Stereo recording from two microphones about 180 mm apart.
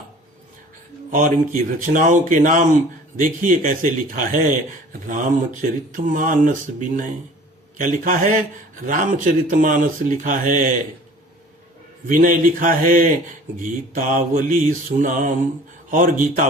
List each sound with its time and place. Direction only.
1.1 s speech: 45° right (ahead or behind)
12.0 s speech: 45° right (ahead or behind)